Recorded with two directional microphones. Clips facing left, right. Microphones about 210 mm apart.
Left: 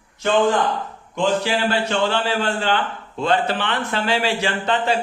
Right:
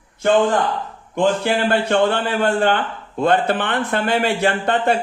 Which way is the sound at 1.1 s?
55° right (ahead or behind).